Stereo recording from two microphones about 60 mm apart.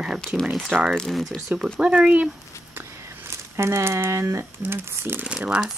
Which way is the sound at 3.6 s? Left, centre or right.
Right.